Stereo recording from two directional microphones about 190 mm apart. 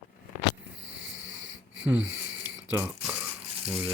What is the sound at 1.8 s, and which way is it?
Speech, 5° right (ahead or behind).